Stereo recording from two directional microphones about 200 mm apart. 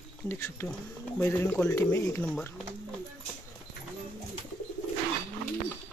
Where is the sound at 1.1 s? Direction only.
10° left (ahead or behind).